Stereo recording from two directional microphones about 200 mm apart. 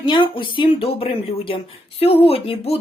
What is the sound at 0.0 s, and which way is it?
Speech, 25° left (ahead or behind).